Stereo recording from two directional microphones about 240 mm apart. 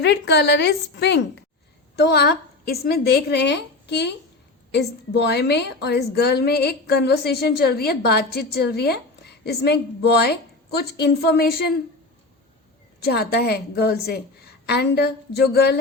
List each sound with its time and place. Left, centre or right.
0.0 s a woman's voice: left
13.0 s a woman's voice: left